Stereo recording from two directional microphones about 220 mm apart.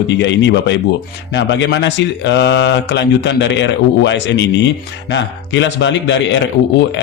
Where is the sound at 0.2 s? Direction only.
55° left (ahead or behind).